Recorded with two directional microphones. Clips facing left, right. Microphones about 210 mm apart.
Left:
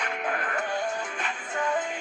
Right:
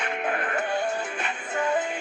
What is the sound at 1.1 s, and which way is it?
Music, 10° right (ahead or behind).